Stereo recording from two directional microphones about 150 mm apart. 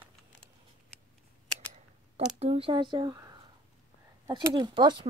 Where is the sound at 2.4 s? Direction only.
40° right (ahead or behind).